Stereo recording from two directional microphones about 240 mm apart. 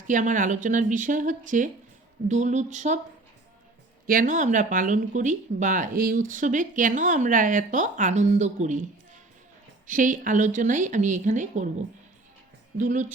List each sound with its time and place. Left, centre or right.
0.1 s speech: right
4.0 s speech: right